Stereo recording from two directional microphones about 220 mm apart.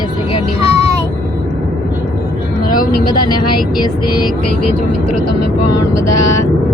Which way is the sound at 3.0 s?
20° left (ahead or behind).